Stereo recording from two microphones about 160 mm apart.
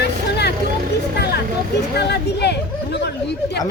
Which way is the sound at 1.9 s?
90° left.